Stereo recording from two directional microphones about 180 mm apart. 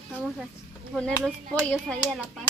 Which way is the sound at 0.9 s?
5° left (ahead or behind).